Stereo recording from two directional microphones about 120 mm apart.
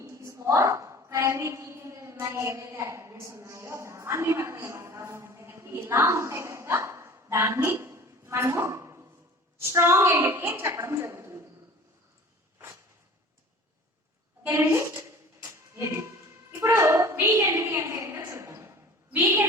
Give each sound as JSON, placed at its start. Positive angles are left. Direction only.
{"t": 0.3, "sound": "a woman's voice", "side_deg": -25}
{"t": 14.4, "sound": "a woman's voice", "side_deg": -20}
{"t": 16.6, "sound": "a woman's voice", "side_deg": -25}
{"t": 18.3, "sound": "a sound", "side_deg": -25}
{"t": 19.1, "sound": "a woman's voice", "side_deg": -15}